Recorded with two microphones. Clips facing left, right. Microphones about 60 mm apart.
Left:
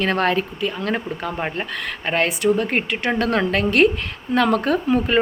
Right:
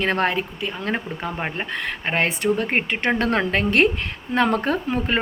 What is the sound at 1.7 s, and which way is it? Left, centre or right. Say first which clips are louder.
Speech: left 1 dB; right.